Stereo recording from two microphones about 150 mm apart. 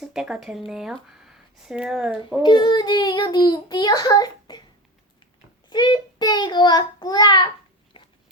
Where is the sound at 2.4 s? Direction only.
30° left (ahead or behind).